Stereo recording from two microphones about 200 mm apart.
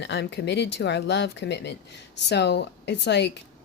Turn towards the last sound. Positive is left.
turn(degrees=60)  # may be behind; listen again after turning